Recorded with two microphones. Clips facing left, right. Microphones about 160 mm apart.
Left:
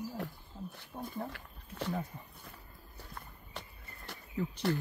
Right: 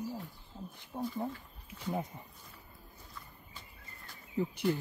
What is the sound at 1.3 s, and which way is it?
Speech, 75° left (ahead or behind).